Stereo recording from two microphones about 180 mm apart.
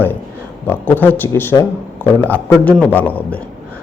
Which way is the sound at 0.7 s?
10° left (ahead or behind).